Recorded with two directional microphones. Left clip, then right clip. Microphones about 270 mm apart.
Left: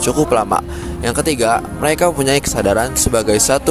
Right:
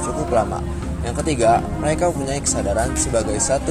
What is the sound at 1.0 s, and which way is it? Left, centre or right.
Speech, left.